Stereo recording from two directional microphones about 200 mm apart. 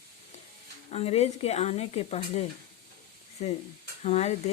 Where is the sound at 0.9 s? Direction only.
30° left (ahead or behind).